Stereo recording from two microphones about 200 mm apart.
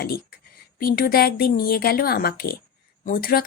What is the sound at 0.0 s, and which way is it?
Speech, 50° left (ahead or behind).